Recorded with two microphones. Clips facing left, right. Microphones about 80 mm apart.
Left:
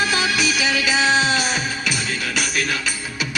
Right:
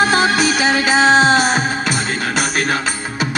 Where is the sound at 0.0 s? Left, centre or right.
Right.